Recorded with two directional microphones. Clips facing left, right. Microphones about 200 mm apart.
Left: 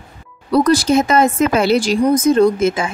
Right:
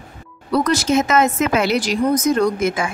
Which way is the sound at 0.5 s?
35° left (ahead or behind).